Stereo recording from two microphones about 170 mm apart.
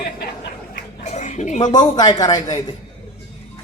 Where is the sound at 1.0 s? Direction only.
45° left (ahead or behind).